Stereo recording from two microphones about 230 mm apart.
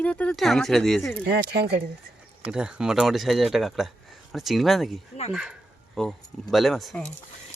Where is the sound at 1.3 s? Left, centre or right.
Right.